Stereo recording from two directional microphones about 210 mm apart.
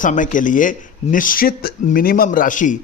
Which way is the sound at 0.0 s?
40° left (ahead or behind).